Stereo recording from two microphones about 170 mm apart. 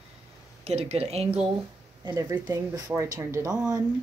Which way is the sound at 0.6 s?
40° right (ahead or behind).